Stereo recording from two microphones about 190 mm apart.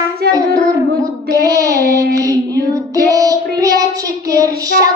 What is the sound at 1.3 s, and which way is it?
Child singing, 15° right (ahead or behind).